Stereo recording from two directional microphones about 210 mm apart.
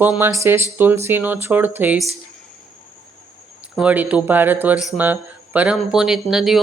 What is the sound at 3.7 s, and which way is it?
Speech, 5° right (ahead or behind).